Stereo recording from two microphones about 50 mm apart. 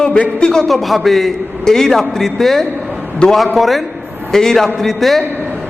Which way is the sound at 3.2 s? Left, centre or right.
Centre.